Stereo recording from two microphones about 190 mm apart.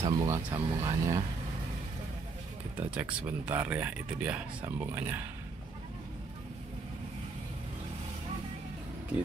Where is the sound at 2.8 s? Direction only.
10° right (ahead or behind).